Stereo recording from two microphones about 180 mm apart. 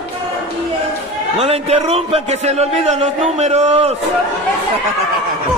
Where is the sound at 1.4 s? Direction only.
35° right (ahead or behind).